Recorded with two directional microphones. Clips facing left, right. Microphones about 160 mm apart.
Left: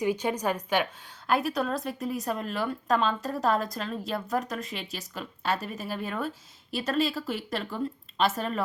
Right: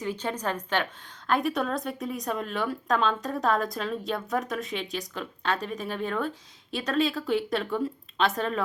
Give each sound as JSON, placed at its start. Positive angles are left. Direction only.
{"t": 0.0, "sound": "a woman's voice", "side_deg": 10}